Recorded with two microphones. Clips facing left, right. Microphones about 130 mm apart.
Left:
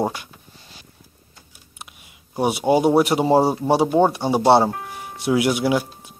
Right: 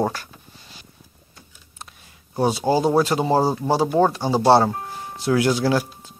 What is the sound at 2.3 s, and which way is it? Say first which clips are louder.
Speech: left 1 dB; 20° left (ahead or behind).